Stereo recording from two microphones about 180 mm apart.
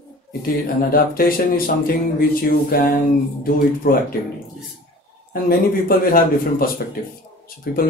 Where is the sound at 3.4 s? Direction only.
55° left (ahead or behind).